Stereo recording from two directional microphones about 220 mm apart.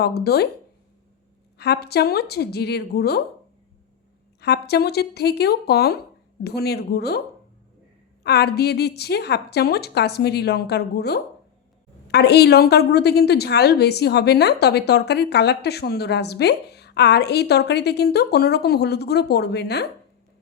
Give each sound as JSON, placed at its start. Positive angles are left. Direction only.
{"t": 0.0, "sound": "a woman's voice", "side_deg": 45}
{"t": 1.5, "sound": "a woman's voice", "side_deg": 50}
{"t": 4.4, "sound": "a woman's voice", "side_deg": 50}
{"t": 8.2, "sound": "a woman's voice", "side_deg": 50}